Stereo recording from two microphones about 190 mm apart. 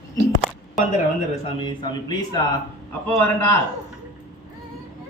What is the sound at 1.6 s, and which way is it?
Speech, 25° left (ahead or behind).